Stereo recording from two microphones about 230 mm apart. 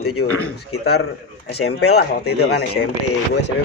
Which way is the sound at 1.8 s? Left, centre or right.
Left.